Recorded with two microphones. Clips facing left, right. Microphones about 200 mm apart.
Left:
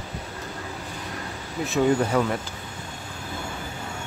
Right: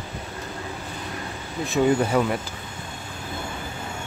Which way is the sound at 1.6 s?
5° right (ahead or behind).